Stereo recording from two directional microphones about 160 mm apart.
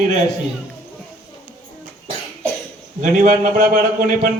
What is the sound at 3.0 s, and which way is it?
Speech, 55° right (ahead or behind).